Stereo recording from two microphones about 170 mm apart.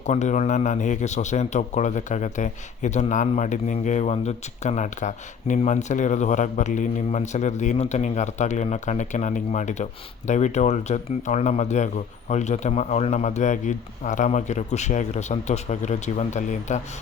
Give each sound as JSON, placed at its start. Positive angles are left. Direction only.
{"t": 0.0, "sound": "a man's voice", "side_deg": 45}